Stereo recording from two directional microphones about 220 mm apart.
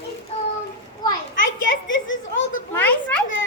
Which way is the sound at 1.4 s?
60° left (ahead or behind).